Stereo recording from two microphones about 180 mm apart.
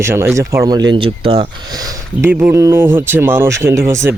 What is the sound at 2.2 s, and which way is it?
Speech, 10° right (ahead or behind).